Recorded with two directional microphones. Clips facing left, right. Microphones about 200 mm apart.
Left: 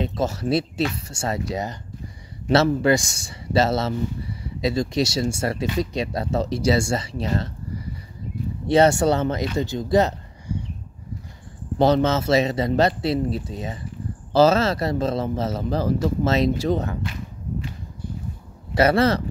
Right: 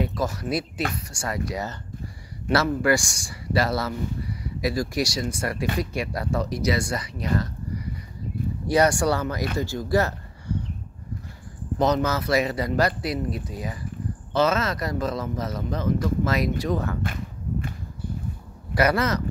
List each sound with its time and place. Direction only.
0.0 s speech: 25° left (ahead or behind)
8.6 s speech: 25° left (ahead or behind)
11.8 s speech: 30° left (ahead or behind)
17.0 s a sound: 50° right (ahead or behind)
18.8 s speech: 30° left (ahead or behind)